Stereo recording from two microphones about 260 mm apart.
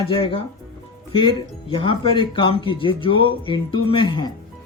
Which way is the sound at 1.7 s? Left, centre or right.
Left.